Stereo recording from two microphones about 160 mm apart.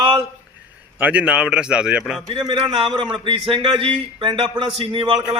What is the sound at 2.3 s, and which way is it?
A man's voice, 30° right (ahead or behind).